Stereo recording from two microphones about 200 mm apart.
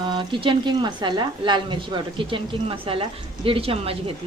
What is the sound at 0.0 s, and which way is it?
A woman's voice, 25° right (ahead or behind).